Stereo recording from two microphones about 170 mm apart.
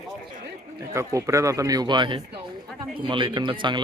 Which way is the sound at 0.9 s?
20° right (ahead or behind).